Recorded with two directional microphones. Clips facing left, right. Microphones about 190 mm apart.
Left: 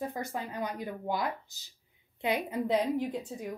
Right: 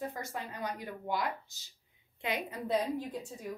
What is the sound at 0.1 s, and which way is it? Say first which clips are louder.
A woman's voice: left 4 dB; 20° left (ahead or behind).